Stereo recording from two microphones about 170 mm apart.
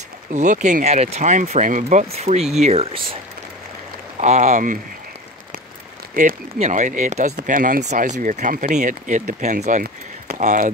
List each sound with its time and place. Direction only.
0.3 s speech: 45° right (ahead or behind)
4.2 s speech: 45° right (ahead or behind)
6.2 s speech: 60° right (ahead or behind)
6.6 s speech: 50° right (ahead or behind)